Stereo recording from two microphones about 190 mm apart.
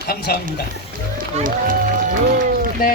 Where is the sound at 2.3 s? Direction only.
45° right (ahead or behind).